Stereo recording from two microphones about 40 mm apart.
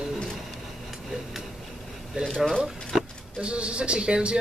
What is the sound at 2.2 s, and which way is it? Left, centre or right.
Speech, centre.